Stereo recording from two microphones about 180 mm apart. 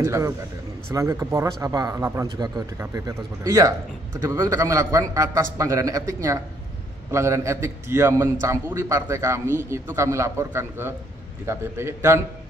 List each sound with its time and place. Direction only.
0.0 s a man's voice: 15° right (ahead or behind)